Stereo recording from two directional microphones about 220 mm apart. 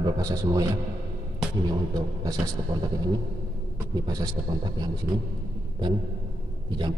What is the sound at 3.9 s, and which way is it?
Speech, 15° right (ahead or behind).